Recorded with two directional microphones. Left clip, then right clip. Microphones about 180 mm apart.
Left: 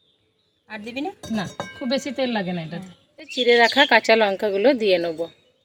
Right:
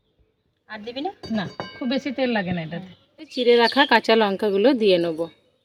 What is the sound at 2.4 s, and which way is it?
Speech, 25° right (ahead or behind).